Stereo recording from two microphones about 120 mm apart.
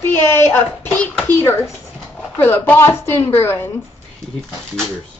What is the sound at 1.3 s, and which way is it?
A woman's voice, 20° left (ahead or behind).